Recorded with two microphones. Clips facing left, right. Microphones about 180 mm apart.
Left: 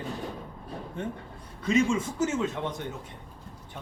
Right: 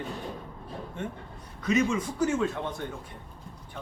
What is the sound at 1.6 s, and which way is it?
Speech, 25° left (ahead or behind).